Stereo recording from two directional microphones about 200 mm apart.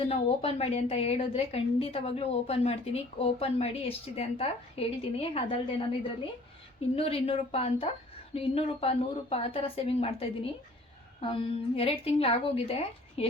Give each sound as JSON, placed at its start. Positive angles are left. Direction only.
{"t": 0.0, "sound": "a woman's voice", "side_deg": 30}